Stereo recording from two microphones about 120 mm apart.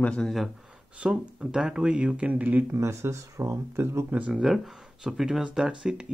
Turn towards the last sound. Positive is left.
turn(degrees=-5)  # may be behind; listen again after turning